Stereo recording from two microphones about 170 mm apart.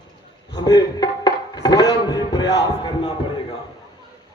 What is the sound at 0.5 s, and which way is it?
Music, 25° left (ahead or behind).